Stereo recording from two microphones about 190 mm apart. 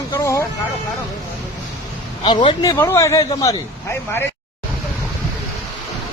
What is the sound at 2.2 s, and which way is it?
Speech, 25° left (ahead or behind).